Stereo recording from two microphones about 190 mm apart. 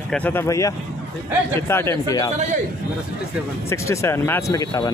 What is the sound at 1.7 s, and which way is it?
Speech, 15° left (ahead or behind).